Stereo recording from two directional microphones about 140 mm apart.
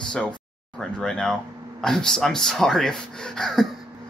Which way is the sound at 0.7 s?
5° left (ahead or behind).